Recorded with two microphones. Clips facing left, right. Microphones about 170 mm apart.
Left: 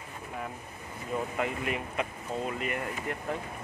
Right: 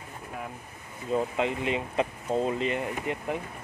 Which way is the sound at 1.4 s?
25° right (ahead or behind).